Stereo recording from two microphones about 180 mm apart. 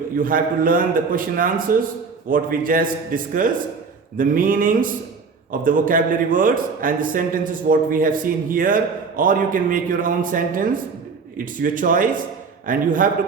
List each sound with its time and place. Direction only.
0.2 s a man's voice: 50° right (ahead or behind)